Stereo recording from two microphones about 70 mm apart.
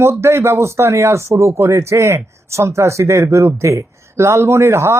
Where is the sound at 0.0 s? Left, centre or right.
Right.